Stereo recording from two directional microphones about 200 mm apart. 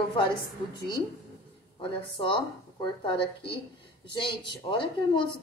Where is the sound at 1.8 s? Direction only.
25° left (ahead or behind).